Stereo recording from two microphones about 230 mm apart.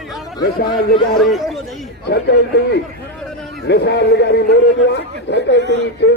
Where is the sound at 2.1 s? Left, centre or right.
Left.